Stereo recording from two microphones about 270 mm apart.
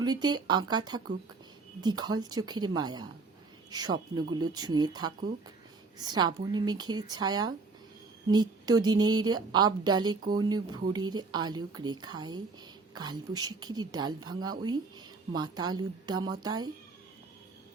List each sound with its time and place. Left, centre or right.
0.0 s speech: centre